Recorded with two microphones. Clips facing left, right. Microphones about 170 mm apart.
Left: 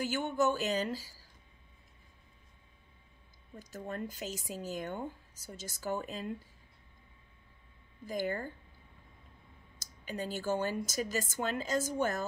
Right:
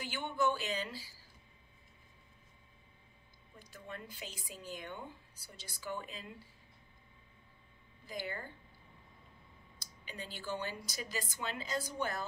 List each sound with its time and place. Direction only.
0.0 s speech: 45° left (ahead or behind)
3.5 s speech: 45° left (ahead or behind)
8.1 s speech: 45° left (ahead or behind)
9.8 s speech: 45° left (ahead or behind)